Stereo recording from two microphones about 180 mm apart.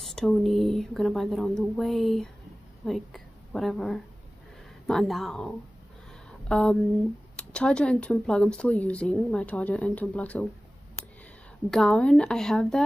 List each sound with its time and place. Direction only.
0.0 s a woman's voice: 5° left (ahead or behind)
6.5 s speech: 5° left (ahead or behind)
11.7 s speech: 5° left (ahead or behind)